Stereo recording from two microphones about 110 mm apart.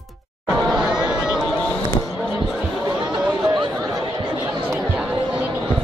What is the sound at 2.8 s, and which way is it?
Chatter, 40° right (ahead or behind).